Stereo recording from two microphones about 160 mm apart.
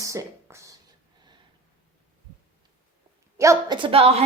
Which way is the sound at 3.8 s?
35° right (ahead or behind).